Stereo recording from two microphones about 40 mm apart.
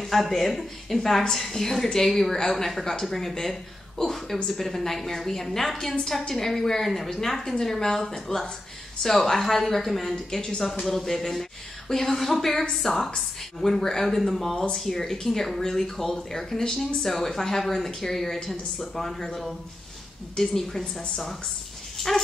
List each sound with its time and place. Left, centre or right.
0.0 s a woman's voice: centre
10.3 s a woman's voice: left
10.8 s speech: centre
21.9 s dog: centre